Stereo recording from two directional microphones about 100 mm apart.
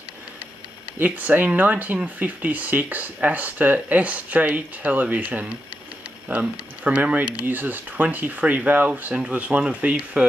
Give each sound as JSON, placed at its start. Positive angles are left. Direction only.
{"t": 0.9, "sound": "speech", "side_deg": -15}